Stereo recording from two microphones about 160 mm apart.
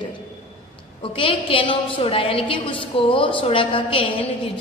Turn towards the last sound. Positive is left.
turn(degrees=30)  # may be behind; listen again after turning